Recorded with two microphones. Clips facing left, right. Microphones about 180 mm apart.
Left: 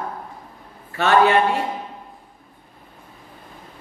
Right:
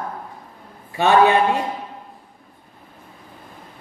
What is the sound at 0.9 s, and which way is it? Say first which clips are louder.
Speech: right 1 dB; 15° right (ahead or behind).